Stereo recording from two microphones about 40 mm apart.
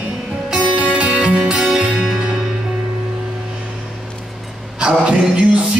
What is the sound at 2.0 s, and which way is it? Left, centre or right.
Music, centre.